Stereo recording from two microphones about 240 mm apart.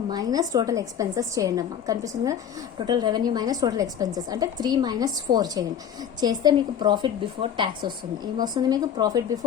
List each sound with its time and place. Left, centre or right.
0.1 s a woman's voice: centre